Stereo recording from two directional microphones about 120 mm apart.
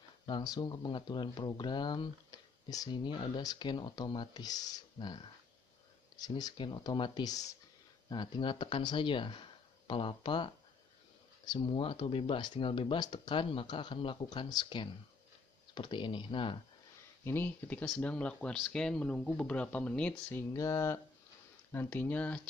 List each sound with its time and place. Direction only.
0.3 s speech: 35° left (ahead or behind)
8.1 s speech: 40° left (ahead or behind)
17.2 s speech: 20° left (ahead or behind)
20.5 s speech: 25° left (ahead or behind)
21.7 s speech: 15° left (ahead or behind)